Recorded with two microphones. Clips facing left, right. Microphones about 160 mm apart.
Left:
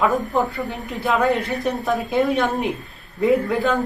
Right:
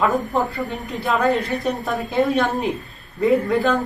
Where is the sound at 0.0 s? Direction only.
Centre (ahead or behind).